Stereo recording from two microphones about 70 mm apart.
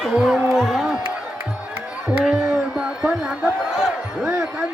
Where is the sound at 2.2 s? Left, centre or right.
Centre.